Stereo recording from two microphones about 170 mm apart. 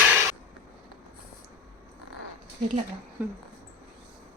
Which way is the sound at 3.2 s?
10° right (ahead or behind).